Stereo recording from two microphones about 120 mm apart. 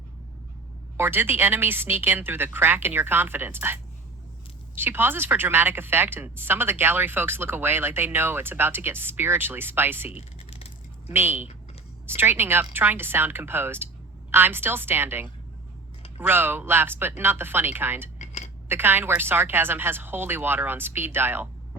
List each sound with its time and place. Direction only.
0.9 s a woman's voice: 15° right (ahead or behind)
4.8 s a woman's voice: 15° right (ahead or behind)
10.1 s a sound: 55° left (ahead or behind)
11.1 s a woman's voice: 15° right (ahead or behind)
18.2 s a sound: 70° left (ahead or behind)
18.7 s a woman's voice: 15° right (ahead or behind)